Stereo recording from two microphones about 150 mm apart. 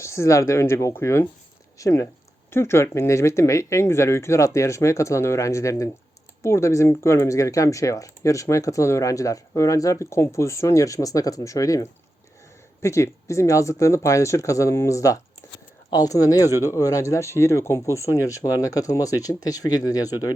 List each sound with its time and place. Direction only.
0.0 s speech: 20° left (ahead or behind)